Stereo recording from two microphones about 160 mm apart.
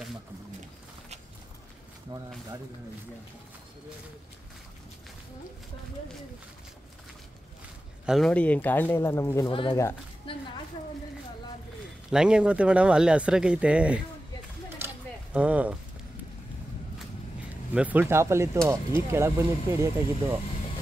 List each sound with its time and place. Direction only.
8.0 s speech: 5° right (ahead or behind)
8.3 s speech: 10° left (ahead or behind)
9.5 s speech: 35° left (ahead or behind)
10.3 s a sound: 30° left (ahead or behind)
12.1 s speech: 5° right (ahead or behind)
15.3 s speech: 10° right (ahead or behind)
17.7 s speech: 10° right (ahead or behind)